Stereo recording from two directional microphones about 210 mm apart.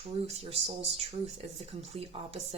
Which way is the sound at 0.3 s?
30° right (ahead or behind).